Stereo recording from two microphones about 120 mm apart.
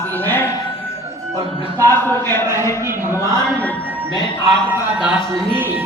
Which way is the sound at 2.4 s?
25° right (ahead or behind).